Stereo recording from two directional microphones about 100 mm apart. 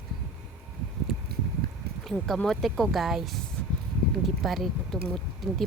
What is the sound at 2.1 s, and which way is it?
Speech, 5° left (ahead or behind).